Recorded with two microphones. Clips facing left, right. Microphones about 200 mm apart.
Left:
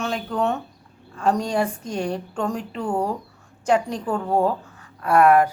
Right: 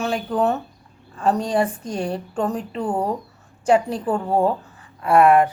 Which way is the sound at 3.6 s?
5° right (ahead or behind).